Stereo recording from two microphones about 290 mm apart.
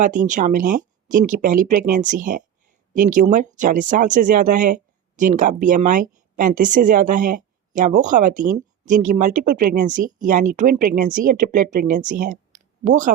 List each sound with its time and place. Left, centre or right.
0.0 s speech: right